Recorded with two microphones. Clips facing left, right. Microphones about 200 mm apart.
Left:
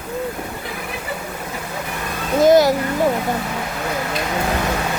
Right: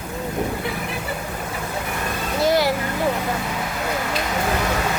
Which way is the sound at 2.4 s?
45° left (ahead or behind).